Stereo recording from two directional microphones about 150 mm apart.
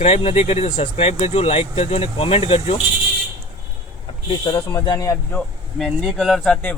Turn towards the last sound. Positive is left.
turn(degrees=0)  # may be behind; listen again after turning